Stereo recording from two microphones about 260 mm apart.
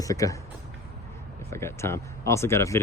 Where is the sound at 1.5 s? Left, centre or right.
Centre.